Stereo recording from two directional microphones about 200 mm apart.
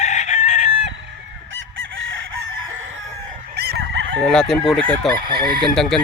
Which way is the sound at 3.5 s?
55° right (ahead or behind).